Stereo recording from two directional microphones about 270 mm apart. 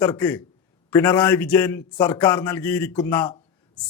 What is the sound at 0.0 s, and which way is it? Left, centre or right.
A man's voice, centre.